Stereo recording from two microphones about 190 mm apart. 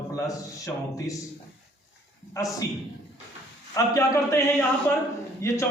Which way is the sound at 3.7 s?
15° left (ahead or behind).